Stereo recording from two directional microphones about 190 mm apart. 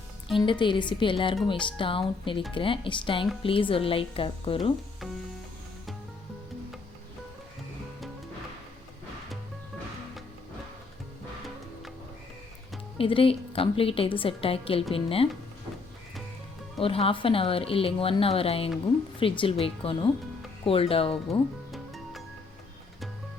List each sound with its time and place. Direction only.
0.3 s speech: 25° left (ahead or behind)
13.0 s speech: 30° left (ahead or behind)
16.7 s speech: 30° left (ahead or behind)
21.7 s music: centre (ahead or behind)